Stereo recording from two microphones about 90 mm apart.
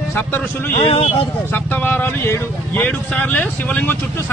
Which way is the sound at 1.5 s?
20° left (ahead or behind).